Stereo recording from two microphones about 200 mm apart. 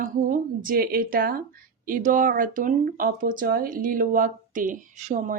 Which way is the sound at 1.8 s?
40° right (ahead or behind).